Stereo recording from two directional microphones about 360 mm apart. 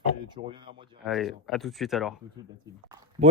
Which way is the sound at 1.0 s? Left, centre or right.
Centre.